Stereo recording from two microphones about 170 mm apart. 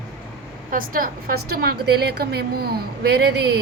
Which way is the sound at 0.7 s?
55° right (ahead or behind).